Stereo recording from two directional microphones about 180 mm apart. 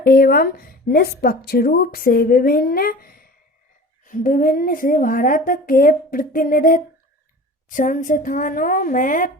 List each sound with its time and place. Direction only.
0.0 s a woman's voice: 55° left (ahead or behind)